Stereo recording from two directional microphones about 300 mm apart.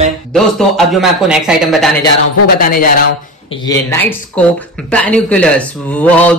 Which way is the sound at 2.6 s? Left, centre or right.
Left.